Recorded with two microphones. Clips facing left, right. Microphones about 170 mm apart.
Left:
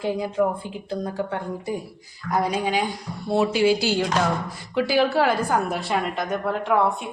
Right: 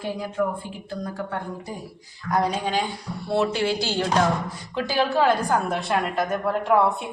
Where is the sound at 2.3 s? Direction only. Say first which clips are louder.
Even; 5° left (ahead or behind).